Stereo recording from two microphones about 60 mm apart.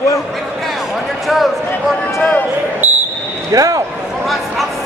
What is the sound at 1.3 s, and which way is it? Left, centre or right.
Speech, centre.